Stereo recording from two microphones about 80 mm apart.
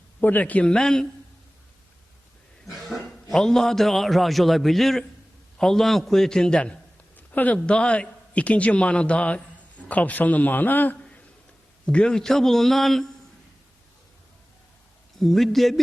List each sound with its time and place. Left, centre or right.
0.2 s a man's voice: left; by 1.0 s centre
2.6 s a man's voice: centre
7.2 s a man's voice: left
11.9 s a man's voice: centre
15.2 s a man's voice: centre